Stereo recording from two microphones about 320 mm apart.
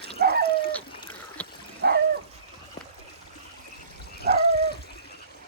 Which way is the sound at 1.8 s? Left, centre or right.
Right.